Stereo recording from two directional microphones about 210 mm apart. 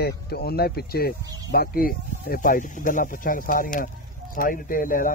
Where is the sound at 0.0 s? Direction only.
50° left (ahead or behind).